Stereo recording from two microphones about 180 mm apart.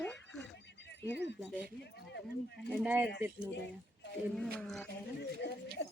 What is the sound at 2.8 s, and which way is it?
Speech, 10° right (ahead or behind).